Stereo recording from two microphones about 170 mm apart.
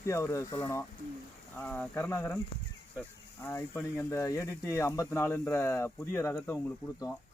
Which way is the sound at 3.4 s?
15° left (ahead or behind).